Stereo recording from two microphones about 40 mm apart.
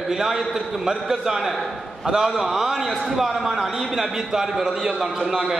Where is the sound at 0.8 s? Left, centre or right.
Centre.